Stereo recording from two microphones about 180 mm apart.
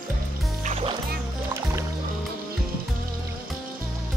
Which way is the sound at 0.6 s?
35° right (ahead or behind).